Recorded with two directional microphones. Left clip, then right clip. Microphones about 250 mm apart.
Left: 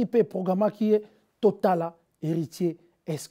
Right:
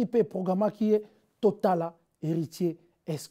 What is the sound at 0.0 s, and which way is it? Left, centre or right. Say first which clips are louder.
Speech: left 3 dB; left.